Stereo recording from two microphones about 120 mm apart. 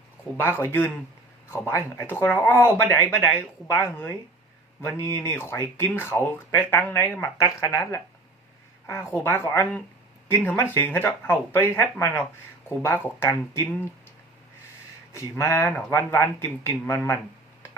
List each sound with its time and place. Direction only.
0.3 s speech: 15° left (ahead or behind)
15.4 s speech: 20° left (ahead or behind)